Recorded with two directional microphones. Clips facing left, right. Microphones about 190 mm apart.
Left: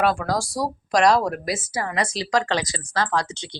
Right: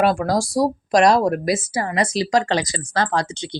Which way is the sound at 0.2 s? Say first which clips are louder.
Right 6 dB; 20° right (ahead or behind).